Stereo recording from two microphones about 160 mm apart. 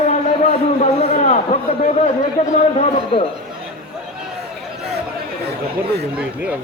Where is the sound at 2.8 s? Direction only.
35° left (ahead or behind).